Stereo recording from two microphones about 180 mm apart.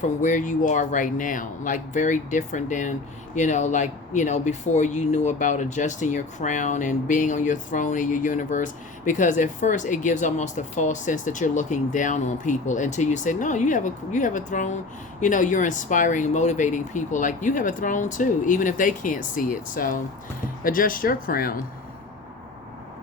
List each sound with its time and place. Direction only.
0.0 s speech: 45° left (ahead or behind)